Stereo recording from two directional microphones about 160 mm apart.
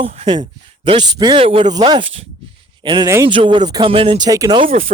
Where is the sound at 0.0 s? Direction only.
35° right (ahead or behind).